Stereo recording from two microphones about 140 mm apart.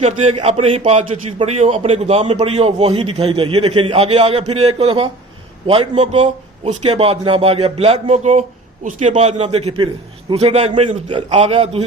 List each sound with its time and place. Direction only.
0.0 s a man's voice: 45° right (ahead or behind)
6.0 s speech: 55° right (ahead or behind)